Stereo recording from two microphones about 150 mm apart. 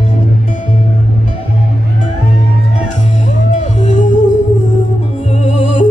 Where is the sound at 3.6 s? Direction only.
50° left (ahead or behind).